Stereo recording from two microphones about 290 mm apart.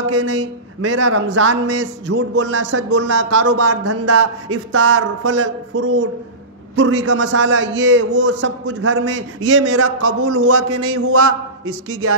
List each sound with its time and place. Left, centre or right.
0.7 s speech: right
1.3 s a man's voice: right
3.6 s a man's voice: right